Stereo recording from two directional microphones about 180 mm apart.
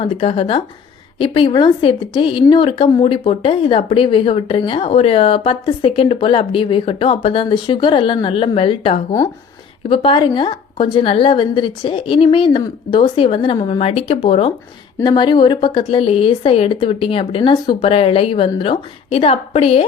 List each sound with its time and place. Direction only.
0.0 s a woman's voice: 30° left (ahead or behind)